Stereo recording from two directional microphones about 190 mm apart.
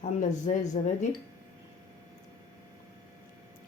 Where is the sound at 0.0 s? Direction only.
40° left (ahead or behind).